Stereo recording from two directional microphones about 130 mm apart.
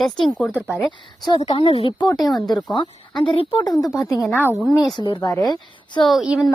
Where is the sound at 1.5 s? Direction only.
45° left (ahead or behind).